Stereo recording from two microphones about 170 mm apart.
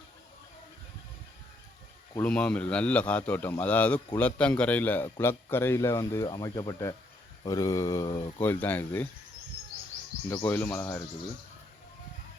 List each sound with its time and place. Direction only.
2.2 s a man's voice: 5° left (ahead or behind)
8.4 s a man's voice: 10° left (ahead or behind)
10.2 s a man's voice: 10° left (ahead or behind)